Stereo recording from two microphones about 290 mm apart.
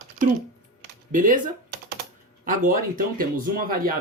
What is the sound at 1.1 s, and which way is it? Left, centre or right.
Speech, right.